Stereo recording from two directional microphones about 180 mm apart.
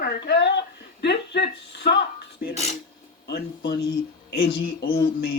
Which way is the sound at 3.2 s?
65° left (ahead or behind).